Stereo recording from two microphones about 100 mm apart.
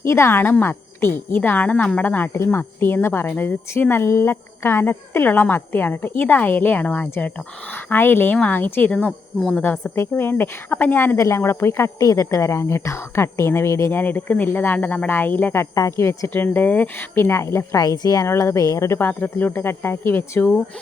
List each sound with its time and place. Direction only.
0.0 s a woman's voice: 25° left (ahead or behind)
14.0 s speech: 20° left (ahead or behind)
15.7 s speech: 35° left (ahead or behind)